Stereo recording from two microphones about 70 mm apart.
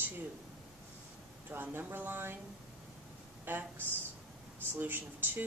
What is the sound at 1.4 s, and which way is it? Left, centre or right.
Speech, right.